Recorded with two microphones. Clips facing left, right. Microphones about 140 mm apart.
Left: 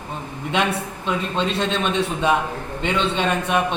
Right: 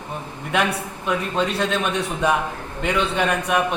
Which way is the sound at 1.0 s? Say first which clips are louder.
Right 1 dB; 25° left (ahead or behind).